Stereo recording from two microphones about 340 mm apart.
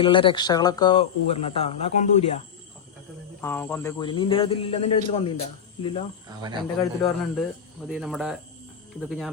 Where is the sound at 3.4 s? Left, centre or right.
Centre.